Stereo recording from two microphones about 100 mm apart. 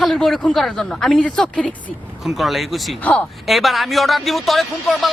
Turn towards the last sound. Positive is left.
turn(degrees=0)  # may be behind; listen again after turning